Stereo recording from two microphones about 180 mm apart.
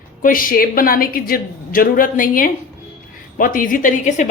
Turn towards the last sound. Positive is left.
turn(degrees=40)  # may be behind; listen again after turning